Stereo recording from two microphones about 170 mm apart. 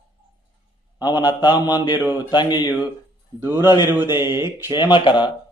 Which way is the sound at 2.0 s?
10° right (ahead or behind).